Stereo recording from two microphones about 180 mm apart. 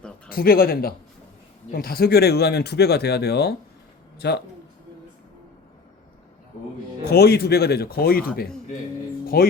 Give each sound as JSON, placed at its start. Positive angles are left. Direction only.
{"t": 0.3, "sound": "speech", "side_deg": 55}
{"t": 7.0, "sound": "speech", "side_deg": 60}
{"t": 9.2, "sound": "speech", "side_deg": 55}